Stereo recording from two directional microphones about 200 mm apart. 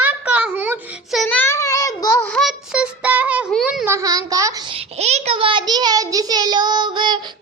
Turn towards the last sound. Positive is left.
turn(degrees=-25)  # may be behind; listen again after turning